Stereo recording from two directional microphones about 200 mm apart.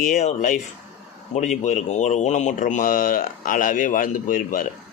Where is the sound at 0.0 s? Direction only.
40° left (ahead or behind).